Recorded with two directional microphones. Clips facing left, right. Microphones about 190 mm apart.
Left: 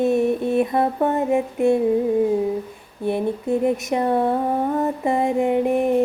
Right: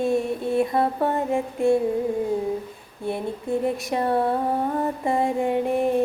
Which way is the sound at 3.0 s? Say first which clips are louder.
Left 5 dB; 20° left (ahead or behind).